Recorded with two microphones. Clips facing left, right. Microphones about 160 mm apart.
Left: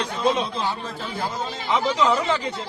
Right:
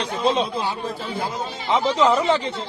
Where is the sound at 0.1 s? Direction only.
30° right (ahead or behind).